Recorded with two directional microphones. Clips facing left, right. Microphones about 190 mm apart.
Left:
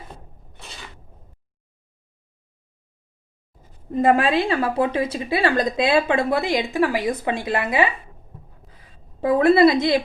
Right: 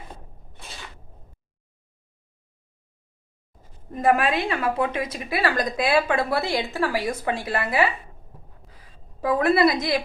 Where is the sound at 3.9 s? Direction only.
25° left (ahead or behind).